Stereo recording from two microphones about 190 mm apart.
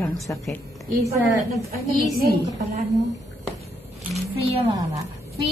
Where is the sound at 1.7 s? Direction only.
50° right (ahead or behind).